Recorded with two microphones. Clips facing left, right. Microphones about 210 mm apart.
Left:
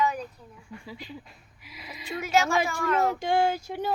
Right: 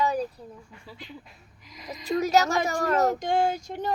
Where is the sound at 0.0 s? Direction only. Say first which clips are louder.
Right 2 dB; 35° right (ahead or behind).